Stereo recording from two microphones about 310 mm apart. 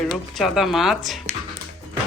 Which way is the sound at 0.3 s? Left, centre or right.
Centre.